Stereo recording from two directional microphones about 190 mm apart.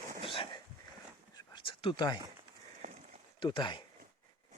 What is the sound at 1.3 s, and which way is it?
Whispering, 25° left (ahead or behind).